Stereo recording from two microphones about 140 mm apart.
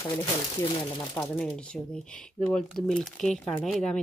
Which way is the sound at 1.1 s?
15° left (ahead or behind).